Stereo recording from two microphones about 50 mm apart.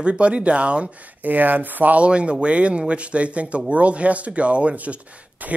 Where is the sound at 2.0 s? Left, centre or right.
Right.